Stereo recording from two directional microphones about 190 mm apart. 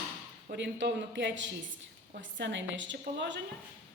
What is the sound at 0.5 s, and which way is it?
A woman's voice, 70° right (ahead or behind).